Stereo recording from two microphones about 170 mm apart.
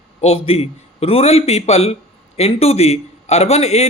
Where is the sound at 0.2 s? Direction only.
35° left (ahead or behind).